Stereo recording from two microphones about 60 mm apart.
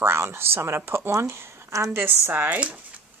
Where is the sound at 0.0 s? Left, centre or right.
Right.